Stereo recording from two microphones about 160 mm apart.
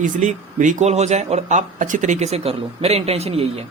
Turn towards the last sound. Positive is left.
turn(degrees=-40)  # may be behind; listen again after turning